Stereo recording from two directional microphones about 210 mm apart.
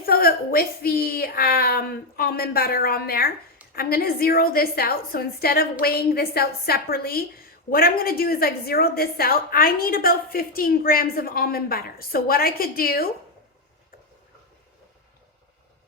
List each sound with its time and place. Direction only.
0.0 s a woman's voice: 45° left (ahead or behind)